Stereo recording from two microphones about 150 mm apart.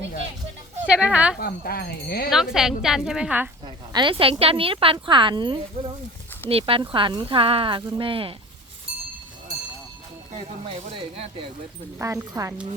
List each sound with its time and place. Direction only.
0.9 s speech: 10° right (ahead or behind)
1.4 s speech: 90° left
2.3 s a woman's voice: 5° right (ahead or behind)
3.9 s speech: 35° right (ahead or behind)
10.7 s speech: 35° right (ahead or behind)
11.9 s speech: 20° right (ahead or behind)